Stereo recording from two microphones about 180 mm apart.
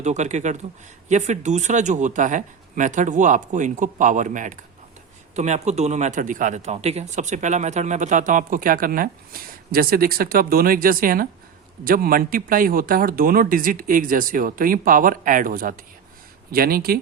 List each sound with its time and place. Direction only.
0.0 s a man's voice: 40° right (ahead or behind); by 17.0 s 55° right (ahead or behind)